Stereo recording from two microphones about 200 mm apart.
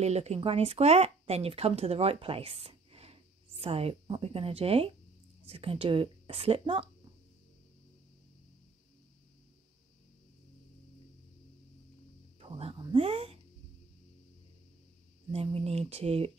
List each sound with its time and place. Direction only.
0.0 s speech: 30° right (ahead or behind)
12.4 s speech: 30° right (ahead or behind)
15.3 s speech: 30° right (ahead or behind)